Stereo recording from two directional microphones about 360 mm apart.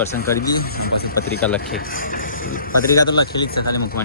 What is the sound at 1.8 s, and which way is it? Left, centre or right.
Speech, left.